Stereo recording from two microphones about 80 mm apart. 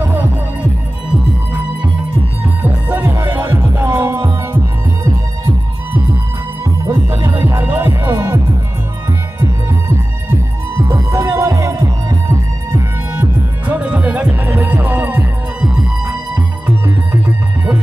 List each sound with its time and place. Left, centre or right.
0.0 s music: right
2.4 s music: right
6.6 s music: right
9.4 s music: right
13.2 s music: centre